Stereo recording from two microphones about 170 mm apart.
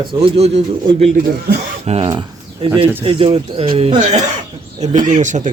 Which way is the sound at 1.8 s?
40° right (ahead or behind).